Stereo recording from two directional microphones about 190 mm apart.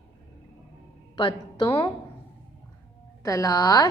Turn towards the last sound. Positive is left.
turn(degrees=20)  # may be behind; listen again after turning